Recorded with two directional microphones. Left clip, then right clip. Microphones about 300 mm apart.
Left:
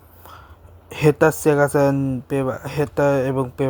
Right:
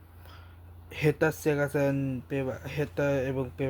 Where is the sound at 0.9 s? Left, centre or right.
Centre.